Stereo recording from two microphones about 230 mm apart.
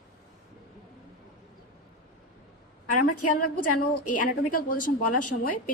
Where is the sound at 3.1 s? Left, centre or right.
Left.